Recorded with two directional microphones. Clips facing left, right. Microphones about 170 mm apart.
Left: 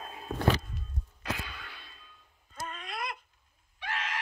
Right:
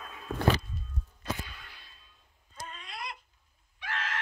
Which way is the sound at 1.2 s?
90° left.